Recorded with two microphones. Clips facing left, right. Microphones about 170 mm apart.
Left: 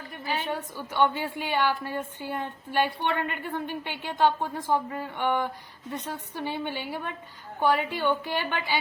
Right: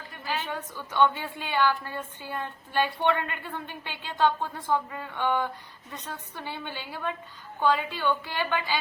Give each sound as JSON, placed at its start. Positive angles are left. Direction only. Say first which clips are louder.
{"t": 0.4, "sound": "a woman's voice", "louder": "left 3 dB", "side_deg": 15}